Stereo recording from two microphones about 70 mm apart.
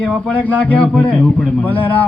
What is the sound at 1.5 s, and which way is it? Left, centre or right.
Speech, left.